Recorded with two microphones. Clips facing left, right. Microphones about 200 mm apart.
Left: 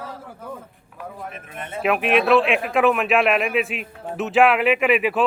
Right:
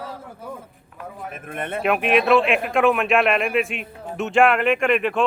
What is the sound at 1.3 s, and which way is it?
Speech, 55° right (ahead or behind).